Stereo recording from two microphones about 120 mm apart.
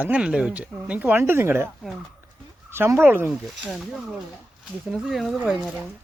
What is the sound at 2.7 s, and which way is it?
Speech, 20° right (ahead or behind).